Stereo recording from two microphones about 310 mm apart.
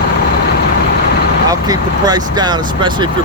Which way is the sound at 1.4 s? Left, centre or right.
Centre.